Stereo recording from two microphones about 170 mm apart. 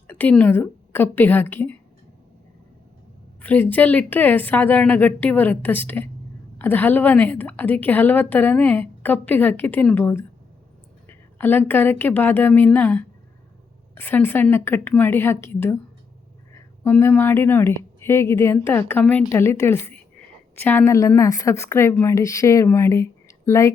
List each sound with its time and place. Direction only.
0.1 s a woman's voice: 10° left (ahead or behind)
3.4 s a woman's voice: 10° left (ahead or behind)